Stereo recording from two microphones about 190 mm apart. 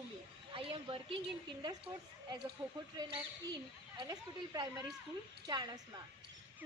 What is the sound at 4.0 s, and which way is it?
Speech, 20° right (ahead or behind).